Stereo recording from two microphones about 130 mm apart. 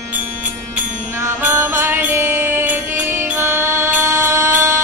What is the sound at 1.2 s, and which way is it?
Music, 20° right (ahead or behind).